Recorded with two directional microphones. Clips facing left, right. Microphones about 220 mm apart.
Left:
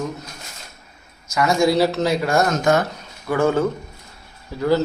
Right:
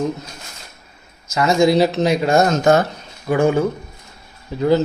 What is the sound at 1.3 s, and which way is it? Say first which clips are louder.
Speech: right 3 dB; 25° right (ahead or behind).